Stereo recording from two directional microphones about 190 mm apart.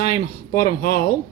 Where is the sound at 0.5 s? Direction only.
50° left (ahead or behind).